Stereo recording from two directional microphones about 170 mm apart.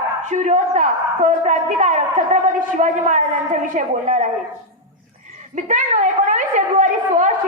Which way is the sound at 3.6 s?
50° right (ahead or behind).